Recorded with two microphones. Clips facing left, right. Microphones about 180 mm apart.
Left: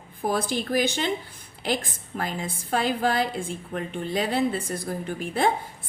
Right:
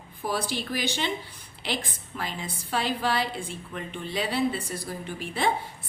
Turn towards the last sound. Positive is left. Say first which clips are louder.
# left 4 dB
turn(degrees=50)  # may be behind; listen again after turning